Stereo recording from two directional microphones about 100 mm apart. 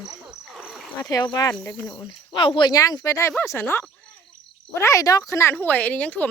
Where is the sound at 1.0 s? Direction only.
40° left (ahead or behind).